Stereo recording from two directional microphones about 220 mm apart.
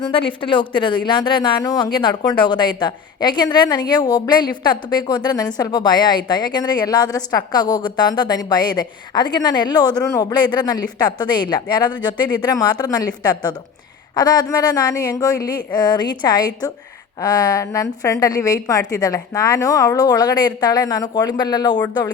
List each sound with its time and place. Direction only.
0.0 s a woman's voice: 25° left (ahead or behind)